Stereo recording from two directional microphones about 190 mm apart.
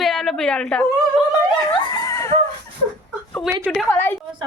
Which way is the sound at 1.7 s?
20° left (ahead or behind).